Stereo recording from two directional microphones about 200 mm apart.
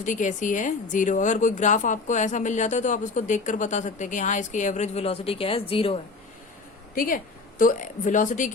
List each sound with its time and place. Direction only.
0.0 s a woman's voice: 40° left (ahead or behind)
6.9 s a woman's voice: 45° left (ahead or behind)